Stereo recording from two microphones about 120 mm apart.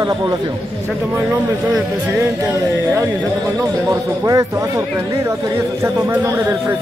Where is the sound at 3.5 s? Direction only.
25° right (ahead or behind).